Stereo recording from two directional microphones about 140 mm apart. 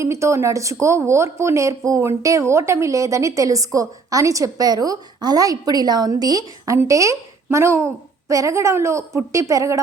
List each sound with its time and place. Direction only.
0.0 s a woman's voice: 20° right (ahead or behind)